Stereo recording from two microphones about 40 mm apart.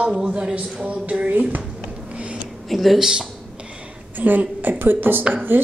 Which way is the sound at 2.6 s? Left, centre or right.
Centre.